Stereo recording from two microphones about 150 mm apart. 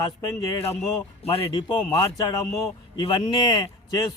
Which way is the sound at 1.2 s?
40° left (ahead or behind).